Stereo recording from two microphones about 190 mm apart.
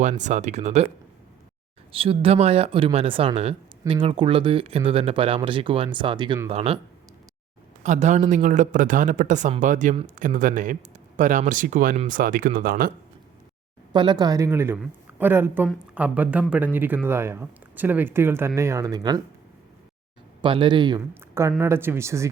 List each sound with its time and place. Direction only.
0.0 s a man's voice: 40° right (ahead or behind)
1.9 s a man's voice: 30° right (ahead or behind)
7.9 s a man's voice: 40° right (ahead or behind)
13.9 s speech: 25° right (ahead or behind)
20.4 s speech: 25° right (ahead or behind)
21.0 s speech: 15° right (ahead or behind)